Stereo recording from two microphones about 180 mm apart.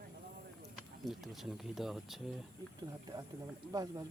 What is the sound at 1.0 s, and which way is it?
Speech, centre (ahead or behind).